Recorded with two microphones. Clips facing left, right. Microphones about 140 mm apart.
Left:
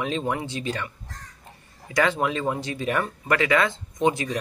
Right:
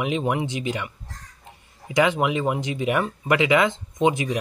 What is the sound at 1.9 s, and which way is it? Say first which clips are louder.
Speech: right 3 dB; 15° right (ahead or behind).